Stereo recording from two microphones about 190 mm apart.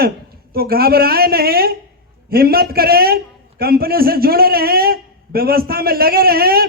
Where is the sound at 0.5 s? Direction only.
55° right (ahead or behind).